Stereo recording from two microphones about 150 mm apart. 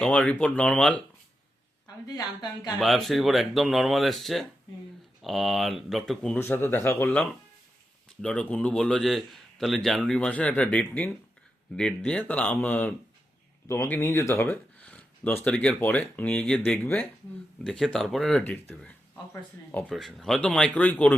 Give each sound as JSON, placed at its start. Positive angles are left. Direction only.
{"t": 0.0, "sound": "speech", "side_deg": 10}
{"t": 2.0, "sound": "speech", "side_deg": 25}
{"t": 2.7, "sound": "a man's voice", "side_deg": 0}
{"t": 18.7, "sound": "a sound", "side_deg": 5}
{"t": 19.9, "sound": "a man's voice", "side_deg": 0}